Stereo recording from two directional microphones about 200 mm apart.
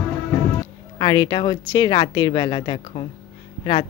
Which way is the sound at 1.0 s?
25° left (ahead or behind).